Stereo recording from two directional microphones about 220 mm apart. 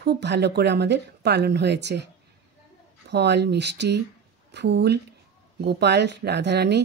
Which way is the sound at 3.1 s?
50° right (ahead or behind).